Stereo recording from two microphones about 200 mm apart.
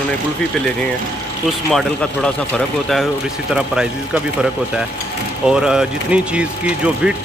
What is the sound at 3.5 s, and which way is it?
Speech, 5° right (ahead or behind).